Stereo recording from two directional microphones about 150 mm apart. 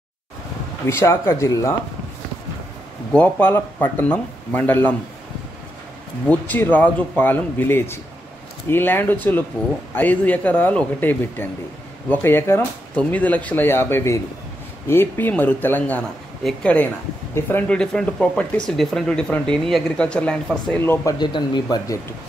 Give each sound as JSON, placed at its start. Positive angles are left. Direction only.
{"t": 0.8, "sound": "speech", "side_deg": 20}
{"t": 3.1, "sound": "speech", "side_deg": 10}
{"t": 6.2, "sound": "speech", "side_deg": 10}
{"t": 20.8, "sound": "speech", "side_deg": 15}
{"t": 21.2, "sound": "speech", "side_deg": 30}